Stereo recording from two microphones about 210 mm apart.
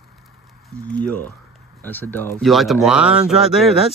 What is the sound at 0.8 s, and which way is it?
Speech, 5° left (ahead or behind).